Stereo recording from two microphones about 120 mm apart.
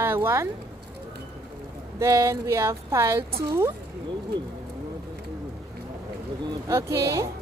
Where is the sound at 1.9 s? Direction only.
25° right (ahead or behind).